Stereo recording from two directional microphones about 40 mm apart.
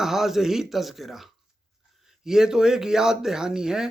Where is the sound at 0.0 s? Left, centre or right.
Centre.